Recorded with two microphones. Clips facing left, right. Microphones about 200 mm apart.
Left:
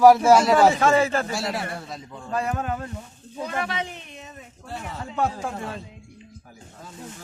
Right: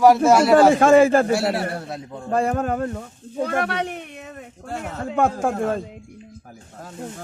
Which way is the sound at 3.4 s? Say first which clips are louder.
Right 5 dB; 60° right (ahead or behind).